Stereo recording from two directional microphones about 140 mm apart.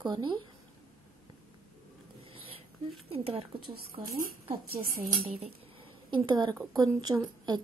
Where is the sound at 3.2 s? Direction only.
45° right (ahead or behind).